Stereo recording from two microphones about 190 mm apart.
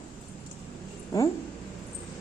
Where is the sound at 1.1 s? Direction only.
15° left (ahead or behind).